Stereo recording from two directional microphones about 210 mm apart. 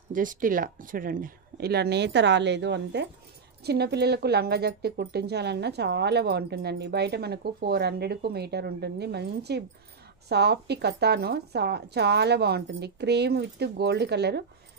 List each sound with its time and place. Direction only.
0.1 s speech: 40° right (ahead or behind)